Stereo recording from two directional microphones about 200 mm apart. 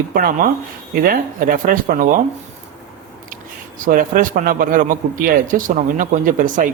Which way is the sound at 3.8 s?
45° right (ahead or behind).